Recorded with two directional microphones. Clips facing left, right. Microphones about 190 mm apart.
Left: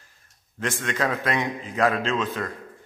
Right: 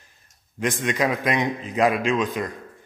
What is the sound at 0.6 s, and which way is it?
A man's voice, 15° right (ahead or behind).